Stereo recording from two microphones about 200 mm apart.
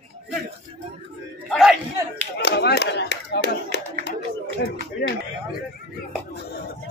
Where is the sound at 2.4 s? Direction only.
55° left (ahead or behind).